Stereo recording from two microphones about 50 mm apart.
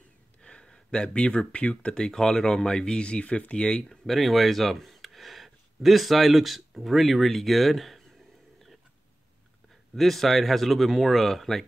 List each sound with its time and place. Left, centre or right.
0.4 s speech: centre
3.9 s speech: centre
9.9 s speech: centre